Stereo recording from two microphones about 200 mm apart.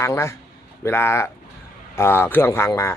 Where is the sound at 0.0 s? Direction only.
15° left (ahead or behind).